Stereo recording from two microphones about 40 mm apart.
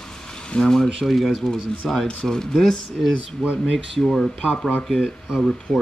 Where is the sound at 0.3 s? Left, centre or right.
Centre.